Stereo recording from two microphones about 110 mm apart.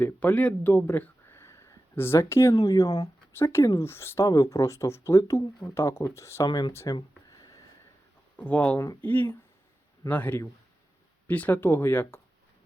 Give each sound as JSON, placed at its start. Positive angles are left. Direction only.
{"t": 0.0, "sound": "speech", "side_deg": 15}
{"t": 5.4, "sound": "speech", "side_deg": 40}
{"t": 5.7, "sound": "speech", "side_deg": 25}
{"t": 6.5, "sound": "speech", "side_deg": 40}
{"t": 7.3, "sound": "a sound", "side_deg": 30}
{"t": 8.4, "sound": "speech", "side_deg": 15}